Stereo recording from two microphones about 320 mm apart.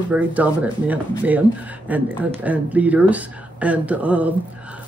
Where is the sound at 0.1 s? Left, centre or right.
Centre.